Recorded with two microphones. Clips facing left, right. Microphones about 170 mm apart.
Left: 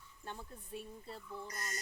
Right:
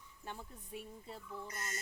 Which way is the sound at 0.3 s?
15° right (ahead or behind).